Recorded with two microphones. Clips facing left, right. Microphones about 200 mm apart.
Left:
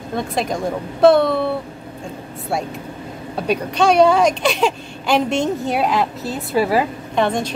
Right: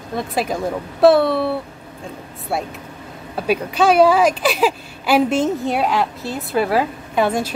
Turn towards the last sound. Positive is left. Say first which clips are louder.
# even
turn(degrees=-5)  # may be behind; listen again after turning